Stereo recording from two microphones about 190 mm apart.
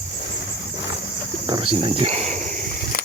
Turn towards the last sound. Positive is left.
turn(degrees=-35)  # may be behind; listen again after turning